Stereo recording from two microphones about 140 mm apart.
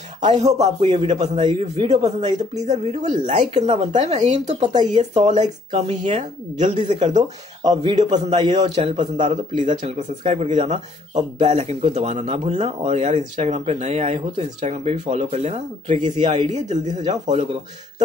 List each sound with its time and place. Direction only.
0.3 s speech: 50° right (ahead or behind)
0.8 s speech: 35° right (ahead or behind)
2.6 s speech: 55° right (ahead or behind)
7.6 s speech: 30° right (ahead or behind)
7.9 s speech: 50° right (ahead or behind)
16.3 s speech: 30° right (ahead or behind)
16.5 s speech: 55° right (ahead or behind)